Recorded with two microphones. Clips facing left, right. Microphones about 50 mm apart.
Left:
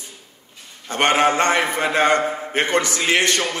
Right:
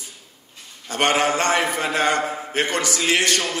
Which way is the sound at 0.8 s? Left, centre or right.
Left.